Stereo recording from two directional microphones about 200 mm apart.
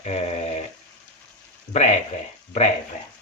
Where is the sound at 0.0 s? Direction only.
35° left (ahead or behind).